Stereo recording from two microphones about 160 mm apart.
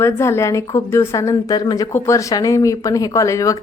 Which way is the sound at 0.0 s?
15° left (ahead or behind).